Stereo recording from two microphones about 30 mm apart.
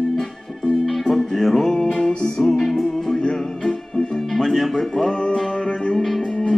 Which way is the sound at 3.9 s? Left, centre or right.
Left.